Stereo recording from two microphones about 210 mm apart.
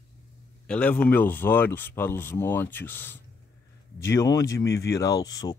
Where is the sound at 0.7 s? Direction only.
5° left (ahead or behind).